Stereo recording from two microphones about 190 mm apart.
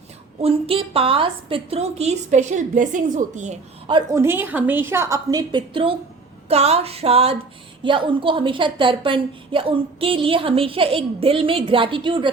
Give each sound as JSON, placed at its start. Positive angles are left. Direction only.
{"t": 0.4, "sound": "a woman's voice", "side_deg": -30}
{"t": 3.8, "sound": "a woman's voice", "side_deg": -25}
{"t": 4.2, "sound": "a woman's voice", "side_deg": -10}